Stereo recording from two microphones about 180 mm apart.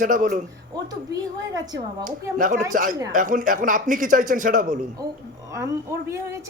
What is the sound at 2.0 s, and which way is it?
A man's voice, 45° right (ahead or behind).